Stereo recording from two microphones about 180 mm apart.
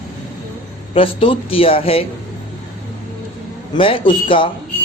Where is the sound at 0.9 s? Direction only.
30° left (ahead or behind).